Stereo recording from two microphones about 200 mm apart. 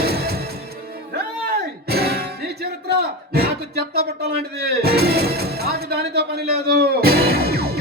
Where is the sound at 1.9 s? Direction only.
50° right (ahead or behind).